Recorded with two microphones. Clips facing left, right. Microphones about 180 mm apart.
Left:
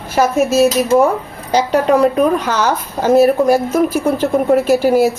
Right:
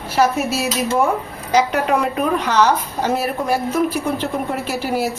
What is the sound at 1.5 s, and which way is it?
A woman's voice, 35° left (ahead or behind).